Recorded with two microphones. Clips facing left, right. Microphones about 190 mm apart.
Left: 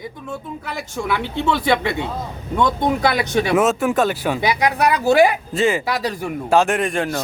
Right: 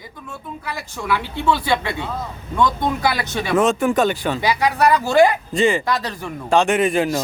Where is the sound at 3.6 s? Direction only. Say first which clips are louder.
Right 3 dB; centre (ahead or behind).